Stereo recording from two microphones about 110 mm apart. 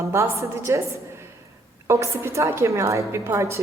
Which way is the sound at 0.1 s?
25° right (ahead or behind).